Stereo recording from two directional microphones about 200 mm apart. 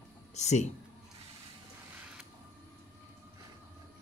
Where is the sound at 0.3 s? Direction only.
35° left (ahead or behind).